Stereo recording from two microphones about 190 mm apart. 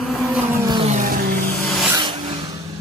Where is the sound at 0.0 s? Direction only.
Centre (ahead or behind).